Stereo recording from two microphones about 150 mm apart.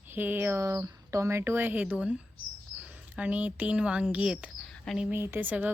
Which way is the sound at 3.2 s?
10° right (ahead or behind).